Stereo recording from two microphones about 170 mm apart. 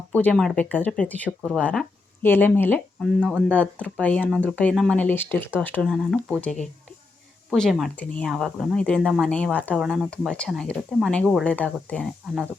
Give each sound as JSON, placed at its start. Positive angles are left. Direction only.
{"t": 0.1, "sound": "speech", "side_deg": 10}
{"t": 3.0, "sound": "speech", "side_deg": -5}
{"t": 3.5, "sound": "speech", "side_deg": 10}
{"t": 9.7, "sound": "speech", "side_deg": -5}